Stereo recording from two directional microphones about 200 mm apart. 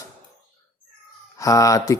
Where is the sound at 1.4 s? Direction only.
15° left (ahead or behind).